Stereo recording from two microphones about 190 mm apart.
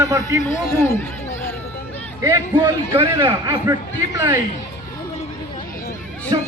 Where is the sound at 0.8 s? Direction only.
10° left (ahead or behind).